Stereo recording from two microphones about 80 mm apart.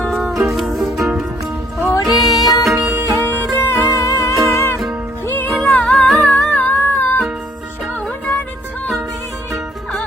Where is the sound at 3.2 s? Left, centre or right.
Left.